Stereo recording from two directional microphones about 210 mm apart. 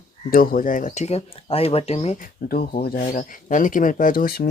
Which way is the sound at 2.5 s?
45° left (ahead or behind).